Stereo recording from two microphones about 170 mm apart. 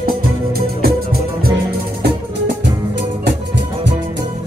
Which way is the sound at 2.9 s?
90° right.